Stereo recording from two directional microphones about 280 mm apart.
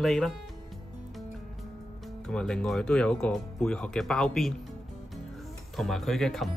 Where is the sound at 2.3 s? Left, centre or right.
Centre.